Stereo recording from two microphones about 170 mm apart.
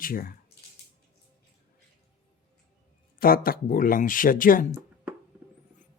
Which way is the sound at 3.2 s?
60° left (ahead or behind).